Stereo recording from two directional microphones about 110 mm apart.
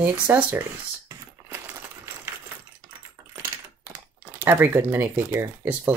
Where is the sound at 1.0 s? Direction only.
20° right (ahead or behind).